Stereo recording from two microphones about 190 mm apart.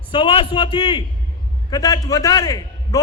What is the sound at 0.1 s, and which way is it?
A man's voice, 25° left (ahead or behind).